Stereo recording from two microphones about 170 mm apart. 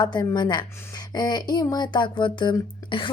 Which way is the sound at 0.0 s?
25° left (ahead or behind).